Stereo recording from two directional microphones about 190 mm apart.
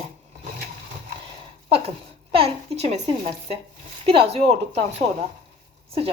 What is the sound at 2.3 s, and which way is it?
Speech, 30° right (ahead or behind).